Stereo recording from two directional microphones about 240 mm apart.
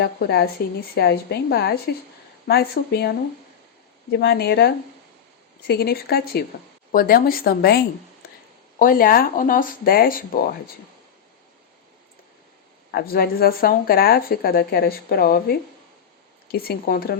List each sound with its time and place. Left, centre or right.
0.0 s speech: left
4.2 s speech: left
8.8 s speech: left
12.9 s speech: left